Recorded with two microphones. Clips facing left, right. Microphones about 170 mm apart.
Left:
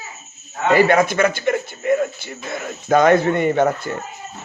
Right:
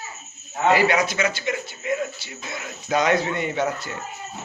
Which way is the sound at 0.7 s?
50° left (ahead or behind).